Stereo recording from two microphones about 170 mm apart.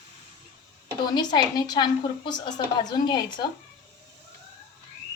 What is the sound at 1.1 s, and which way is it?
A woman's voice, 25° left (ahead or behind).